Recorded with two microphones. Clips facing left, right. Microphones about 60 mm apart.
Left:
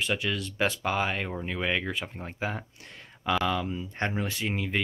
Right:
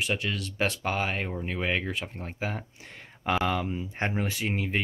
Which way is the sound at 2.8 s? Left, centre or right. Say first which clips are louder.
Right 1 dB; right.